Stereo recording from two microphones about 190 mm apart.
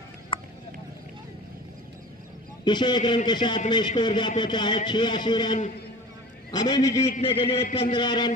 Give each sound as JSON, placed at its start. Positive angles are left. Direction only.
{"t": 0.3, "sound": "vehicle", "side_deg": 30}
{"t": 2.6, "sound": "speech", "side_deg": 25}